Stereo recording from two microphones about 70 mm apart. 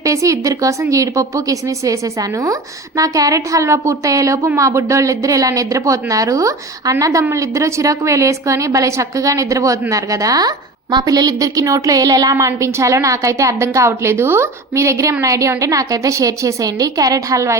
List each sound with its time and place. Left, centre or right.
0.0 s a woman's voice: right